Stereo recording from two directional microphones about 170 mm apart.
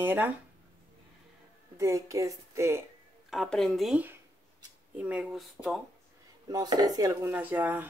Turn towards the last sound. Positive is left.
turn(degrees=-10)  # may be behind; listen again after turning